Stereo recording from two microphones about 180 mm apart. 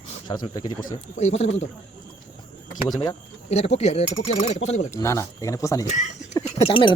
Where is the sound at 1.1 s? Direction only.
35° left (ahead or behind).